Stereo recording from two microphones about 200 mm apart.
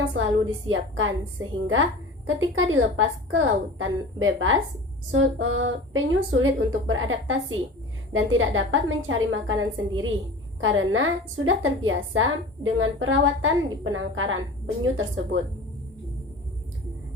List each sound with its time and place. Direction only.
0.7 s a woman's voice: 80° right